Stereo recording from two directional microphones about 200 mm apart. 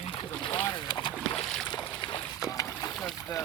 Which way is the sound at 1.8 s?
25° left (ahead or behind).